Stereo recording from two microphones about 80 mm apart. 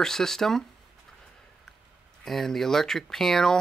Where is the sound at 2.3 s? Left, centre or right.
Centre.